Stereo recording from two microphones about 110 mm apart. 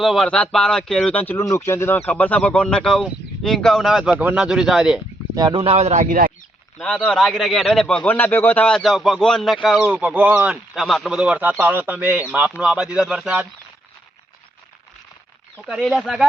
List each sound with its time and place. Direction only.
0.0 s speech: centre (ahead or behind)
5.5 s speech: 50° right (ahead or behind)
5.7 s speech: 80° right
6.7 s speech: 5° left (ahead or behind)
8.1 s speech: 20° left (ahead or behind)
8.8 s speech: centre (ahead or behind)
9.8 s speech: 10° right (ahead or behind)
11.2 s speech: 10° right (ahead or behind)
15.5 s speech: centre (ahead or behind)